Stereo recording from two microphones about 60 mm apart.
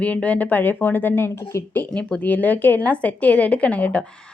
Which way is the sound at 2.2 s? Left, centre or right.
Left.